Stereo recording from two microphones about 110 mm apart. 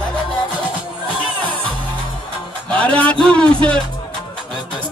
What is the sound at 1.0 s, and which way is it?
Music, 50° left (ahead or behind).